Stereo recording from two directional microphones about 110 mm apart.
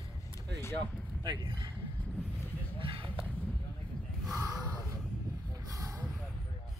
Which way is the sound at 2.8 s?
55° right (ahead or behind).